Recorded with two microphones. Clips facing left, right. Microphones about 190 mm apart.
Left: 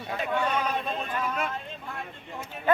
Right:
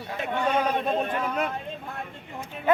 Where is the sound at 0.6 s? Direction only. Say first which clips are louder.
Right 5 dB; 45° right (ahead or behind).